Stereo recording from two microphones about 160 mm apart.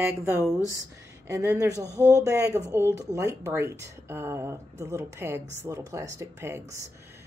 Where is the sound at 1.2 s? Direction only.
15° right (ahead or behind).